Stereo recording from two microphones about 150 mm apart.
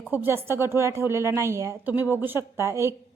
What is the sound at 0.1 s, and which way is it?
A woman's voice, 15° right (ahead or behind).